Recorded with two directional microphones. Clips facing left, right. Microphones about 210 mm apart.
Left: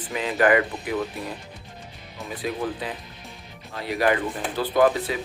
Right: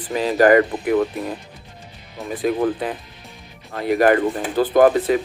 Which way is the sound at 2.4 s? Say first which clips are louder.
Right 8 dB; 50° right (ahead or behind).